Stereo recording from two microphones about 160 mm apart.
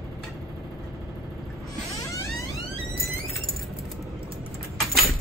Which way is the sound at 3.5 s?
Centre (ahead or behind).